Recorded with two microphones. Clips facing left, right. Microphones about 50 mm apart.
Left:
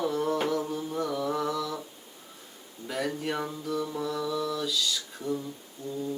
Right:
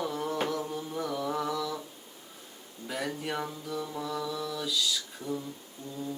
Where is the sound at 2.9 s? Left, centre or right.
Centre.